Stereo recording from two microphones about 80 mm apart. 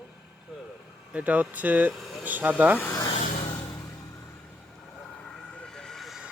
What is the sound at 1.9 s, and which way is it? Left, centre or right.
Vehicle, centre.